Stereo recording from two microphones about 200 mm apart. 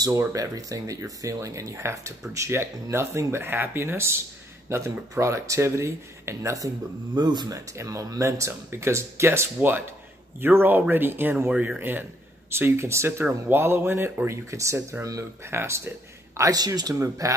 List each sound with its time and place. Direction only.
0.0 s speech: 15° right (ahead or behind)